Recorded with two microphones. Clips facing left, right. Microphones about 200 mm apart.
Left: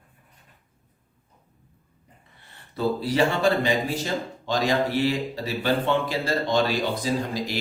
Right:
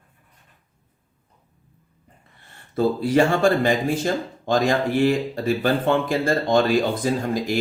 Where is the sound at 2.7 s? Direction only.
50° right (ahead or behind).